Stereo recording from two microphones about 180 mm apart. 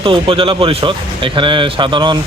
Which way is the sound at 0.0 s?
30° right (ahead or behind).